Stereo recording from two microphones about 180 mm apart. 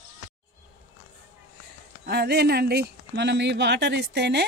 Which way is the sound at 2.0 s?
65° right (ahead or behind).